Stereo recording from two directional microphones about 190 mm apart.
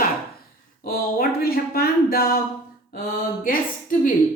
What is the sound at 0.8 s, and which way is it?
A woman's voice, 50° left (ahead or behind).